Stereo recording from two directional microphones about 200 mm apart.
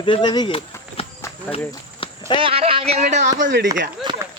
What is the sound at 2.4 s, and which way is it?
Speech, 30° right (ahead or behind).